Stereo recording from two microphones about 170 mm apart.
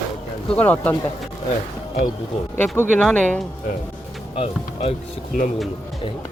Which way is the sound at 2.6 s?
10° left (ahead or behind).